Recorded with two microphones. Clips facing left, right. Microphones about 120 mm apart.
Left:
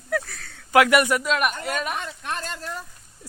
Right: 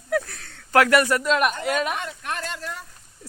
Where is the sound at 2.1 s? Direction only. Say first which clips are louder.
Even; 30° left (ahead or behind).